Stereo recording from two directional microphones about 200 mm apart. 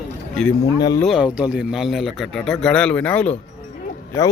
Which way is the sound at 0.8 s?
20° left (ahead or behind).